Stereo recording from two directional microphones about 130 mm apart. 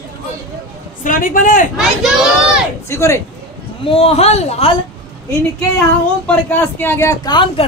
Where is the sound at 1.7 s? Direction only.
5° right (ahead or behind).